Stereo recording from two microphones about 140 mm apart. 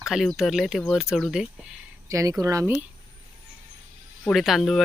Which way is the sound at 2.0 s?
25° right (ahead or behind).